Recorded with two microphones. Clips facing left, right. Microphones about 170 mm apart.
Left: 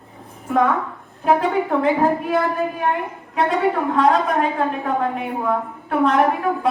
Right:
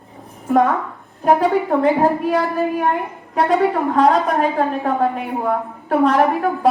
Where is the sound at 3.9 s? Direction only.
40° right (ahead or behind).